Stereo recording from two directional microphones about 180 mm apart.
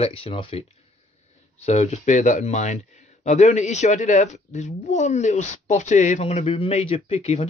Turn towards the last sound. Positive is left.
turn(degrees=35)  # may be behind; listen again after turning